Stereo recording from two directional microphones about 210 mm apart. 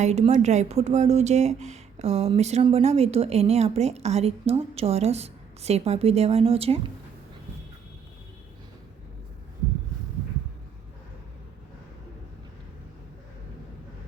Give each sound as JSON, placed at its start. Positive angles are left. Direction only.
{"t": 0.0, "sound": "speech", "side_deg": -35}